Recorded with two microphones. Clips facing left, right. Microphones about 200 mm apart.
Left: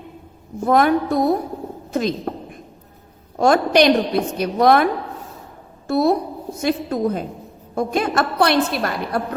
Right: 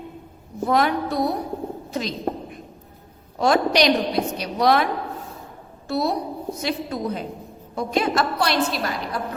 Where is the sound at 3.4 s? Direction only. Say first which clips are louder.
Left 4 dB; 50° left (ahead or behind).